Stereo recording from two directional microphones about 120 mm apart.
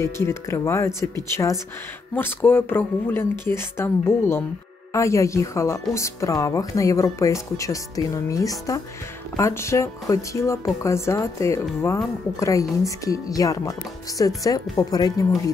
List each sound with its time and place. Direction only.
0.0 s speech: 25° left (ahead or behind)